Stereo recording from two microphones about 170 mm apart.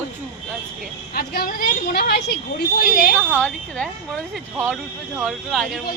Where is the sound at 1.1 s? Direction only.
65° left (ahead or behind).